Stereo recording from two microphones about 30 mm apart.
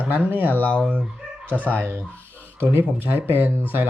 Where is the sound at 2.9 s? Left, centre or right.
Right.